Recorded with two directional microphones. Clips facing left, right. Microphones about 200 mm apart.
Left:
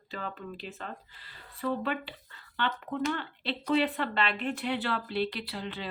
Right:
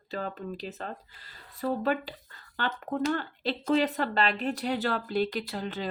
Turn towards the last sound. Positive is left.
turn(degrees=-45)  # may be behind; listen again after turning